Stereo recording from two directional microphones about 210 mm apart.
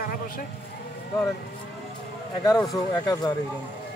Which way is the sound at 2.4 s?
15° left (ahead or behind).